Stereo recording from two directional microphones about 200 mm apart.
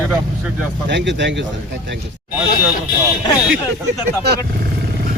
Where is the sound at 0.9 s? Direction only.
60° right (ahead or behind).